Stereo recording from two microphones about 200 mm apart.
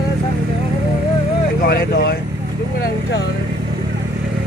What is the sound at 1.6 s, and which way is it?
Speech, 55° left (ahead or behind).